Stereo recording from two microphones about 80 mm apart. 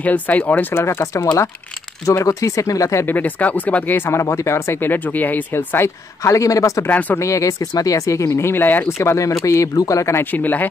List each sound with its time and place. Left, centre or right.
0.0 s speech: centre
0.8 s speech: left
3.1 s speech: left
6.2 s speech: left
6.9 s speech: left
7.2 s speech: left
8.8 s speech: left
10.3 s speech: left